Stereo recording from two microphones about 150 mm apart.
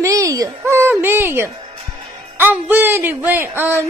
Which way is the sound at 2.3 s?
15° right (ahead or behind).